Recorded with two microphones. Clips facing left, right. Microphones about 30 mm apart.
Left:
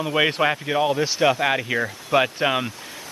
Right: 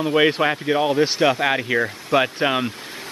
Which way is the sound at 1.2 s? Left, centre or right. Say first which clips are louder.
Right 1 dB; centre.